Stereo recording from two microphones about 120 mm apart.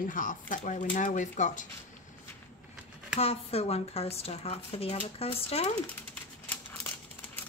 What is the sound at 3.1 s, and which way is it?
Speech, 55° left (ahead or behind).